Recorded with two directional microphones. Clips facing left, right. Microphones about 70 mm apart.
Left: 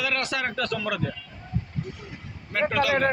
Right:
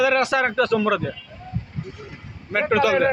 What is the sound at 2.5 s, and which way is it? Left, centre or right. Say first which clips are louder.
Speech: right 5 dB; right.